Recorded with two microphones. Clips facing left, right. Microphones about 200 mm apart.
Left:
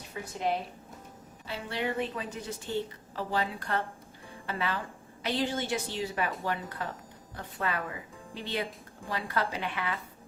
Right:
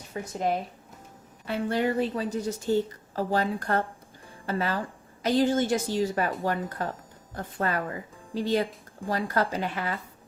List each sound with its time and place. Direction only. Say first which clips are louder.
0.1 s a woman's voice: right 4 dB; 45° right (ahead or behind)